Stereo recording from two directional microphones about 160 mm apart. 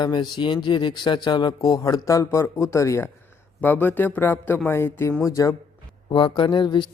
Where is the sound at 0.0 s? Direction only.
25° left (ahead or behind).